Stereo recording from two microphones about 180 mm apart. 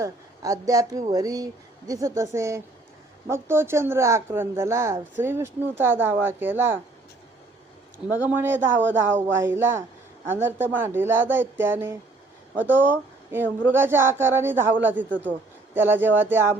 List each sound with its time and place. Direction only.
0.0 s a woman's voice: 20° right (ahead or behind)
8.0 s speech: 10° right (ahead or behind)